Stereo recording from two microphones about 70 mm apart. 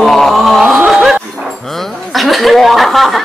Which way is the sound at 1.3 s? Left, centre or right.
Centre.